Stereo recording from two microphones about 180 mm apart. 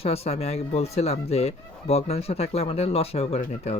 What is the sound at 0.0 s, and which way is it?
Speech, 35° left (ahead or behind).